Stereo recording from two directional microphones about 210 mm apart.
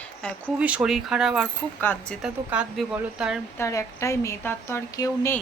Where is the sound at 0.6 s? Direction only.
5° right (ahead or behind).